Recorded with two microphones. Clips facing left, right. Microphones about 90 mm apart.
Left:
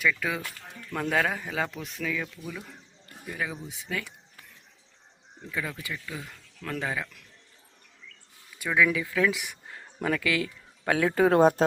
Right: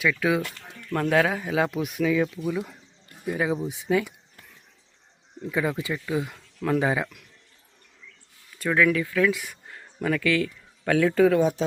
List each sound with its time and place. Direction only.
0.0 s speech: 5° right (ahead or behind)
5.5 s speech: 25° right (ahead or behind)
8.5 s speech: 10° left (ahead or behind)
11.3 s speech: 50° left (ahead or behind)